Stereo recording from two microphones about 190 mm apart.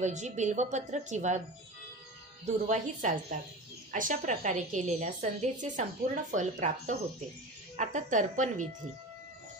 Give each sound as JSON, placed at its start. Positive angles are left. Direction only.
{"t": 0.0, "sound": "a woman's voice", "side_deg": -40}
{"t": 2.4, "sound": "a woman's voice", "side_deg": -40}